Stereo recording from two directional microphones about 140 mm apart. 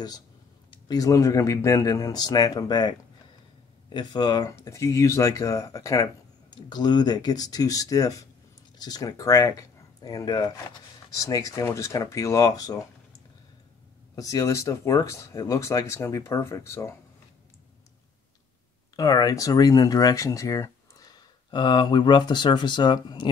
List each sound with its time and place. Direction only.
0.7 s speech: 25° left (ahead or behind)
18.9 s speech: 25° left (ahead or behind)